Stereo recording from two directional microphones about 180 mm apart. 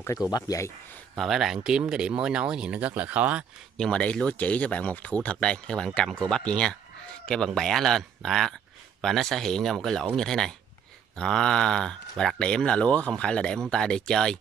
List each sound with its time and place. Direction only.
0.3 s speech: 20° left (ahead or behind)
1.1 s speech: centre (ahead or behind)
3.7 s speech: 5° left (ahead or behind)